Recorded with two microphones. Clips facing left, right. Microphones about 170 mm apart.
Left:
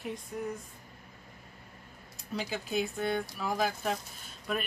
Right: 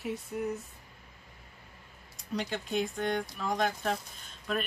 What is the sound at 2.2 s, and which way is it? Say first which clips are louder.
Speech: right 1 dB; 5° left (ahead or behind).